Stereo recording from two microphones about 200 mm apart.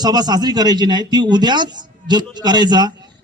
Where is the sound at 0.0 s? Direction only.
20° right (ahead or behind).